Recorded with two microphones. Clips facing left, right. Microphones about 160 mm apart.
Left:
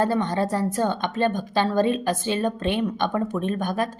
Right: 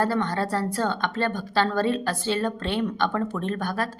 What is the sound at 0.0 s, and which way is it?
A woman's voice, 20° left (ahead or behind).